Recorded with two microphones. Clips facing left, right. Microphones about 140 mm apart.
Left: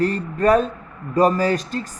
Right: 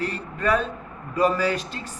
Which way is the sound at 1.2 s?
40° left (ahead or behind).